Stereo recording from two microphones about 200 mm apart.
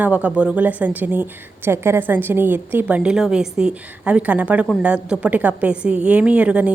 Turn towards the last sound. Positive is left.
turn(degrees=-5)  # may be behind; listen again after turning